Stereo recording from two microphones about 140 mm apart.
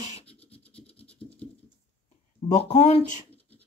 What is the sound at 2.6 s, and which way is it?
Speech, 50° left (ahead or behind).